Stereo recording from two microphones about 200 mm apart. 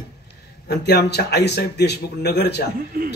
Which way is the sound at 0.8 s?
55° left (ahead or behind).